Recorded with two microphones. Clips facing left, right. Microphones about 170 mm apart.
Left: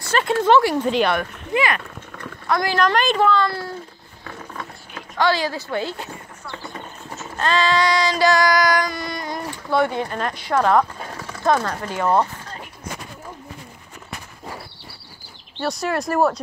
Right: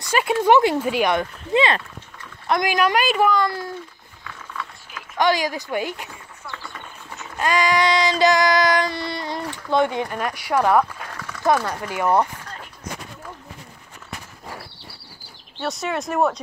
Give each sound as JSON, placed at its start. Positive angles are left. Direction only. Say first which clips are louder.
{"t": 0.1, "sound": "speech", "louder": "even", "side_deg": -10}
{"t": 1.1, "sound": "child singing", "louder": "right 2 dB", "side_deg": -25}
{"t": 2.4, "sound": "speech", "louder": "even", "side_deg": -20}
{"t": 4.2, "sound": "a sound", "louder": "left 1 dB", "side_deg": 40}
{"t": 5.1, "sound": "speech", "louder": "even", "side_deg": -15}
{"t": 6.5, "sound": "clip-clop", "louder": "left 4 dB", "side_deg": 30}
{"t": 7.3, "sound": "child singing", "louder": "even", "side_deg": -15}
{"t": 11.0, "sound": "a sound", "louder": "left 2 dB", "side_deg": 30}
{"t": 11.4, "sound": "speech", "louder": "even", "side_deg": -10}
{"t": 15.6, "sound": "speech", "louder": "left 2 dB", "side_deg": 0}